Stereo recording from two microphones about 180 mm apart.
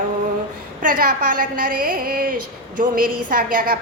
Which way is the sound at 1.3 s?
50° right (ahead or behind).